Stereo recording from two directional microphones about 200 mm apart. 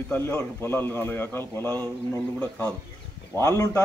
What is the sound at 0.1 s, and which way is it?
A man's voice, 10° left (ahead or behind).